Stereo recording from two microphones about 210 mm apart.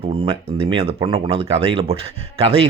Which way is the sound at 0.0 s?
25° right (ahead or behind).